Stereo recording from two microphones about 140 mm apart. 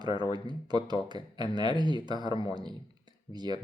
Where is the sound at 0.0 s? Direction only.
30° right (ahead or behind).